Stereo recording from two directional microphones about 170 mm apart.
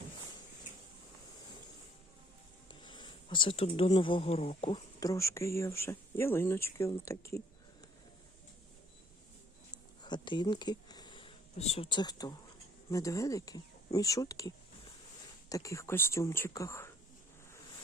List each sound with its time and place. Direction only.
2.6 s speech: 25° left (ahead or behind)
4.9 s speech: 20° left (ahead or behind)
9.7 s speech: 25° left (ahead or behind)